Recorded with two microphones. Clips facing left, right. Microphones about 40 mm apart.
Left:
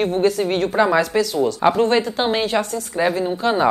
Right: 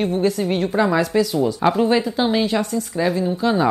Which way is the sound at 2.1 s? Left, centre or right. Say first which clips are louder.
Even; centre.